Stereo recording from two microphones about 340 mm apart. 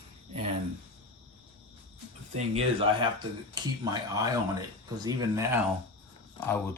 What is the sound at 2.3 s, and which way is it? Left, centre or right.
Speech, centre.